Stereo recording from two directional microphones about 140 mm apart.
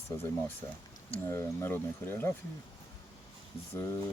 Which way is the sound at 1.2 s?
20° left (ahead or behind).